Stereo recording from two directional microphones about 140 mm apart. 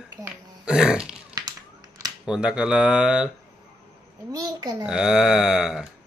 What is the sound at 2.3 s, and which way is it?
Speech, 5° right (ahead or behind).